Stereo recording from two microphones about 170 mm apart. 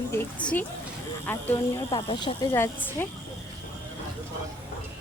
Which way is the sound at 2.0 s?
30° left (ahead or behind).